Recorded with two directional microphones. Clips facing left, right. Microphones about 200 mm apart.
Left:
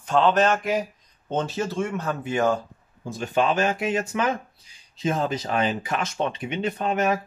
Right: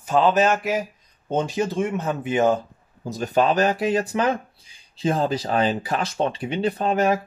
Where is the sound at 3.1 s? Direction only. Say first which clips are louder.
Right 3 dB; 40° right (ahead or behind).